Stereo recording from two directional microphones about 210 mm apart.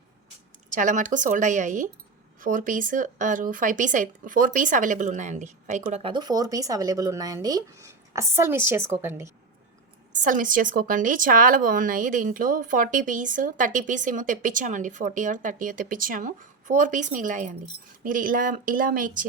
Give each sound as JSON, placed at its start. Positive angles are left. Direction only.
{"t": 0.7, "sound": "speech", "side_deg": -35}
{"t": 10.2, "sound": "speech", "side_deg": -40}